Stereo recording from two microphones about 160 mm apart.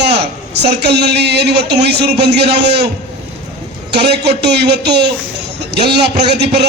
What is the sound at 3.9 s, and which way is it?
A man's voice, 90° right.